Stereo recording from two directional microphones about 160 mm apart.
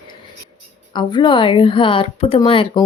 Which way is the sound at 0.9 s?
30° left (ahead or behind).